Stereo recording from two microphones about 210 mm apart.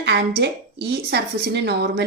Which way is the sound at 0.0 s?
55° right (ahead or behind).